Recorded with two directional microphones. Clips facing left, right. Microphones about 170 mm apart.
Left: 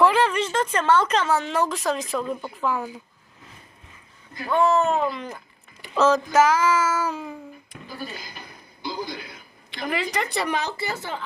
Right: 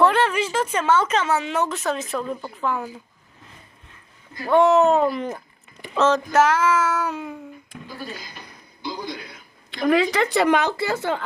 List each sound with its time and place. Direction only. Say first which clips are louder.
0.0 s speech: right 1 dB; centre (ahead or behind)
4.4 s speech: right 5 dB; 30° right (ahead or behind)
5.0 s speech: right 5 dB; 55° right (ahead or behind)
5.9 s speech: even; centre (ahead or behind)
8.8 s a sound: even; centre (ahead or behind)
9.8 s speech: right 8 dB; 60° right (ahead or behind)